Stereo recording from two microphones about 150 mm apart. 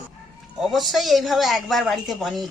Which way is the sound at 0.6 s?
Centre (ahead or behind).